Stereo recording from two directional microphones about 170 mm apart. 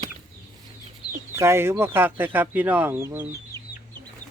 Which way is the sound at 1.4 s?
15° right (ahead or behind).